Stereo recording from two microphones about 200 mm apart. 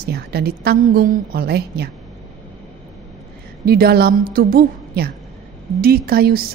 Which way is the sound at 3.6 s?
50° right (ahead or behind).